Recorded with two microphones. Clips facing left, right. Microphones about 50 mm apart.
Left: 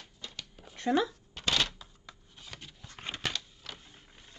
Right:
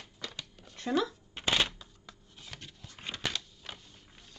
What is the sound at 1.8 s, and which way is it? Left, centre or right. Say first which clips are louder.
Shuffling cards: left 1 dB; centre.